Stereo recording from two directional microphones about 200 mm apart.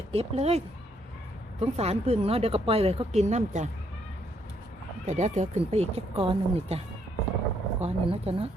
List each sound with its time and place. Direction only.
0.1 s speech: 30° right (ahead or behind)
5.0 s speech: 35° right (ahead or behind)